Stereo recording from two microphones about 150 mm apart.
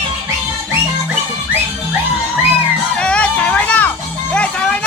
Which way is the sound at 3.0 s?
10° left (ahead or behind).